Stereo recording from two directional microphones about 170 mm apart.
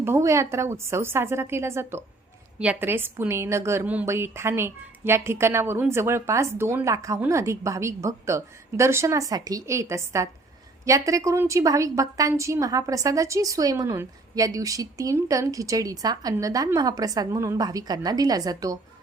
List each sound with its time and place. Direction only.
0.0 s a woman's voice: 15° right (ahead or behind)